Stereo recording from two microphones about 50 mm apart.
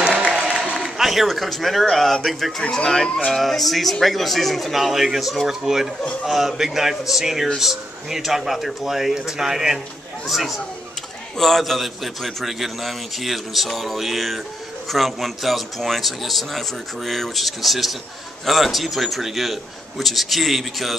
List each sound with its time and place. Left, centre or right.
0.0 s applause: right
0.7 s a man's voice: centre